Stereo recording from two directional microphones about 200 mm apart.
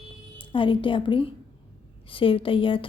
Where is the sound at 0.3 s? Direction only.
25° left (ahead or behind).